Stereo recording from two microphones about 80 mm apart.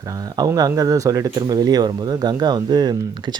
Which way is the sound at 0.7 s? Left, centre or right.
Right.